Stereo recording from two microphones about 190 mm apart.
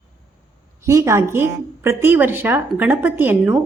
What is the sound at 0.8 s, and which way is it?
Speech, 15° right (ahead or behind).